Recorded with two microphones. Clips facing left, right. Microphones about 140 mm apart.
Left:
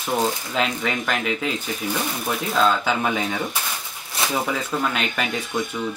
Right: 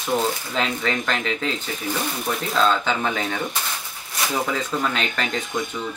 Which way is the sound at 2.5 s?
5° left (ahead or behind).